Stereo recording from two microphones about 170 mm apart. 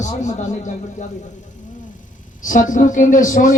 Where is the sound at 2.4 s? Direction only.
50° left (ahead or behind).